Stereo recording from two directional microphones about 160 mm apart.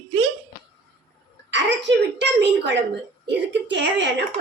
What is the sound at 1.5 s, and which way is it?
A woman's voice, 90° right.